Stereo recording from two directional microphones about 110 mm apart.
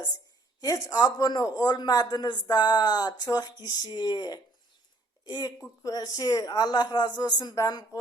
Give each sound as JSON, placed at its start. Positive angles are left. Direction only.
{"t": 0.6, "sound": "speech", "side_deg": 35}